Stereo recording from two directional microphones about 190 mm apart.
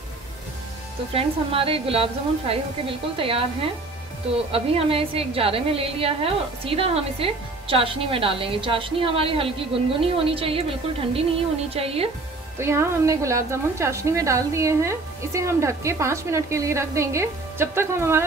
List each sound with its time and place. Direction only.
1.1 s a woman's voice: 30° right (ahead or behind)
4.5 s a woman's voice: 30° right (ahead or behind)
11.7 s a woman's voice: 30° right (ahead or behind)
12.5 s a woman's voice: 15° right (ahead or behind)